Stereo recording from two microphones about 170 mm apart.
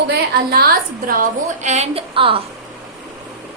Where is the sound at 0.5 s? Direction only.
60° right (ahead or behind); by 2.4 s 30° right (ahead or behind).